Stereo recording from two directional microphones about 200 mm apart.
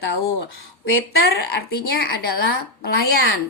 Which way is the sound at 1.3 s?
50° left (ahead or behind).